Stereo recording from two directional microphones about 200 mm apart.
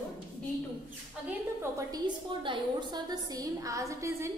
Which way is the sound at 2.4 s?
20° right (ahead or behind).